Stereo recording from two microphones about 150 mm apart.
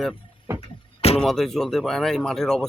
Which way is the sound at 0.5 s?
45° left (ahead or behind).